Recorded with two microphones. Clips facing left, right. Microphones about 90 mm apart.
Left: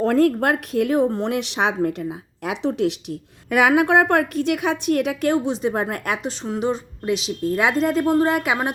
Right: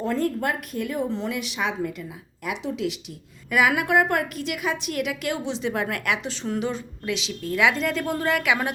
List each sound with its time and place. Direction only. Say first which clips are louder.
0.0 s a woman's voice: left 7 dB; 65° left (ahead or behind); by 8.7 s 30° left (ahead or behind)